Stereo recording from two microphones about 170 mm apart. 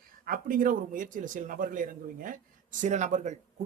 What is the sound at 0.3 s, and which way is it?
A man's voice, 55° right (ahead or behind).